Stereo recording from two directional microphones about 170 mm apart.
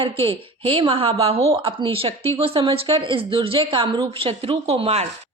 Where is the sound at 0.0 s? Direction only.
35° right (ahead or behind).